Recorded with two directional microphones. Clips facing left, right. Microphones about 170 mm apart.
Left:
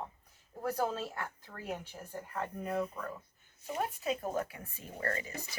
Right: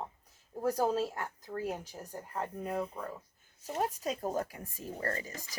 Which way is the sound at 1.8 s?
40° right (ahead or behind).